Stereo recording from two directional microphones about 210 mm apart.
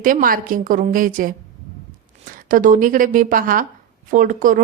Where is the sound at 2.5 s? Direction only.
40° right (ahead or behind).